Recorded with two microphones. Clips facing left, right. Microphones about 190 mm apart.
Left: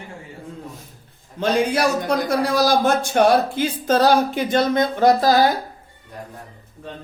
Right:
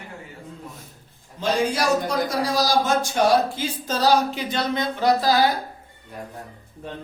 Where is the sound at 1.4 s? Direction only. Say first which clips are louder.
Left 4 dB; 60° left (ahead or behind).